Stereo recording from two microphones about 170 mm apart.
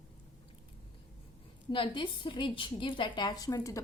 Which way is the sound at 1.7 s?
30° left (ahead or behind).